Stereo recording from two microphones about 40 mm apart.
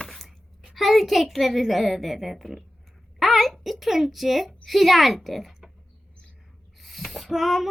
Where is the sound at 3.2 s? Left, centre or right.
Centre.